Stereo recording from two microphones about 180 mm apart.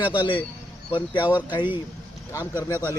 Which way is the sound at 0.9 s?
25° left (ahead or behind).